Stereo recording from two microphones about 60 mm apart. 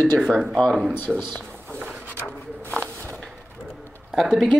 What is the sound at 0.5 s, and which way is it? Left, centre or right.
Speech, centre.